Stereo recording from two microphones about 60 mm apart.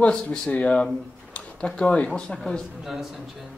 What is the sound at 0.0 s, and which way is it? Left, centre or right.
Speech, centre.